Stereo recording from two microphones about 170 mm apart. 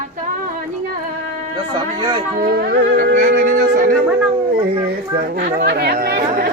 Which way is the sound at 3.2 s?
50° right (ahead or behind).